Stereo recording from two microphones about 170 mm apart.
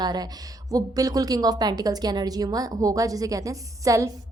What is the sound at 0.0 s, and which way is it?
A woman's voice, 25° right (ahead or behind).